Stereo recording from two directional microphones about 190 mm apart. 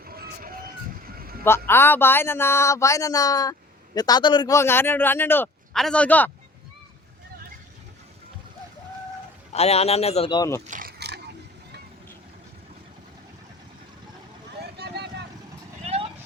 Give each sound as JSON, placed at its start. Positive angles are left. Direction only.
{"t": 0.0, "sound": "vehicle", "side_deg": -50}
{"t": 1.5, "sound": "speech", "side_deg": 10}
{"t": 9.5, "sound": "speech", "side_deg": 35}
{"t": 10.7, "sound": "mechanisms", "side_deg": -50}
{"t": 14.8, "sound": "vehicle", "side_deg": -60}
{"t": 15.8, "sound": "vehicle", "side_deg": -35}